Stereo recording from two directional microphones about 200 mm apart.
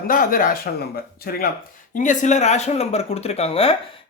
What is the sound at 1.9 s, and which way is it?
A man's voice, 40° left (ahead or behind).